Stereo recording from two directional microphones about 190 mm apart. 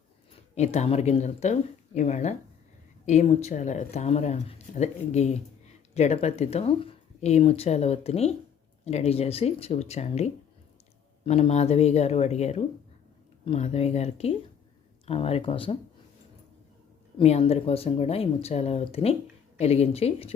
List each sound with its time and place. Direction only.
0.5 s speech: 35° left (ahead or behind)
17.2 s speech: 35° left (ahead or behind)